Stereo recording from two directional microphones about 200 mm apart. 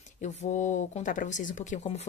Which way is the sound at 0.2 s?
35° left (ahead or behind).